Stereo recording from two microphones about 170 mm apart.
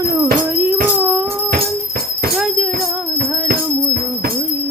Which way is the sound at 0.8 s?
10° right (ahead or behind).